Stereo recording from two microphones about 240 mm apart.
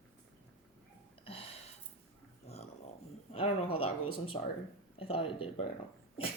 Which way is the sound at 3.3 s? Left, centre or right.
Left.